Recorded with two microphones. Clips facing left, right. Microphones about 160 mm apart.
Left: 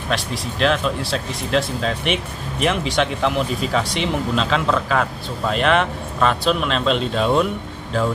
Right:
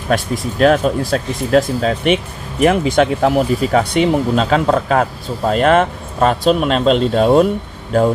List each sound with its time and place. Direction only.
0.1 s speech: 45° right (ahead or behind)